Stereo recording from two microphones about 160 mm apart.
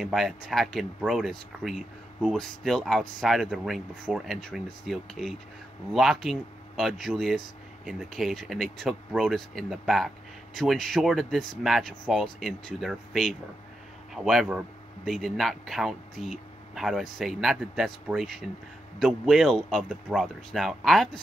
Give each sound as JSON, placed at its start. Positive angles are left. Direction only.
{"t": 0.0, "sound": "speech", "side_deg": 0}